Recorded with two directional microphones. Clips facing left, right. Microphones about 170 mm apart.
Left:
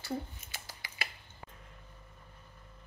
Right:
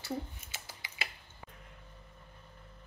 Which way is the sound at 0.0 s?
20° right (ahead or behind).